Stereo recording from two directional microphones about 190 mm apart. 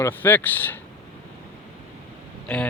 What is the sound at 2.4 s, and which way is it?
Speech, 5° left (ahead or behind).